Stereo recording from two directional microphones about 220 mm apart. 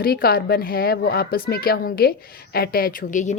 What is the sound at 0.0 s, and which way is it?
Speech, 45° left (ahead or behind).